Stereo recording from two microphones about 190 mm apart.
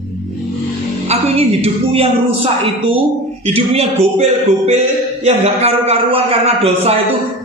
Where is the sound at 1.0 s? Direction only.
35° right (ahead or behind).